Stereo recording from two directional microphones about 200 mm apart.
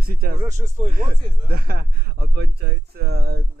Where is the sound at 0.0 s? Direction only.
50° right (ahead or behind).